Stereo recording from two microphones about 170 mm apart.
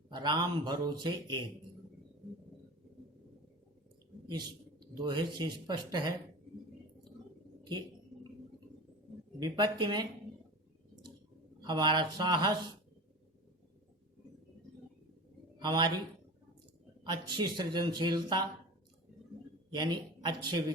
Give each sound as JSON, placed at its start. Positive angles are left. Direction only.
{"t": 0.1, "sound": "speech", "side_deg": -25}
{"t": 4.9, "sound": "speech", "side_deg": -25}
{"t": 7.6, "sound": "bird", "side_deg": -25}
{"t": 9.4, "sound": "speech", "side_deg": -25}
{"t": 11.6, "sound": "speech", "side_deg": -25}
{"t": 15.5, "sound": "a man's voice", "side_deg": -25}
{"t": 17.0, "sound": "speech", "side_deg": -25}
{"t": 19.7, "sound": "speech", "side_deg": -25}